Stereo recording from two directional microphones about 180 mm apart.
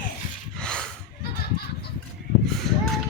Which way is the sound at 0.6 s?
5° left (ahead or behind).